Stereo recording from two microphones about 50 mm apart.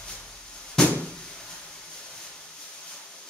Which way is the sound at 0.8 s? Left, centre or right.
Centre.